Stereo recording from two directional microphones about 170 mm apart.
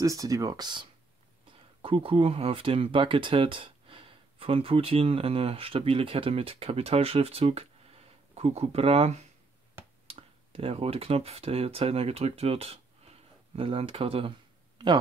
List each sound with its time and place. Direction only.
0.0 s speech: 20° right (ahead or behind)